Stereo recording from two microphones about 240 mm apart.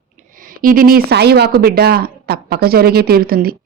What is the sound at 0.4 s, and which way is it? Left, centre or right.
Speech, right.